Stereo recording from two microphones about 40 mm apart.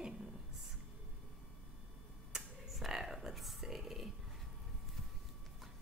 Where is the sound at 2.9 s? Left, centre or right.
Centre.